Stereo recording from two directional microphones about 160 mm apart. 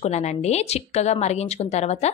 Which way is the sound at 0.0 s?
45° left (ahead or behind).